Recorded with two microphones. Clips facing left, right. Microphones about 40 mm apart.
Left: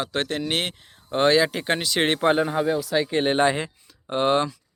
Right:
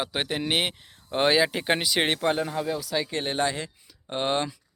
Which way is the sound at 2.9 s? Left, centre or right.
Centre.